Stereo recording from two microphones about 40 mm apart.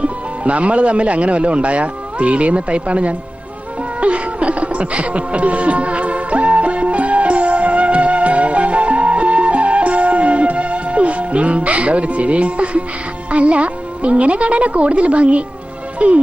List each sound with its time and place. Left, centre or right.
0.0 s a man's voice: right
4.0 s music: right
13.3 s a man's voice: right